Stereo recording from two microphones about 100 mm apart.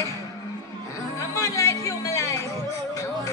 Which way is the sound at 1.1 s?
30° left (ahead or behind).